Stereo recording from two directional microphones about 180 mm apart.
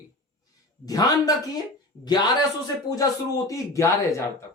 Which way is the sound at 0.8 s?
20° left (ahead or behind).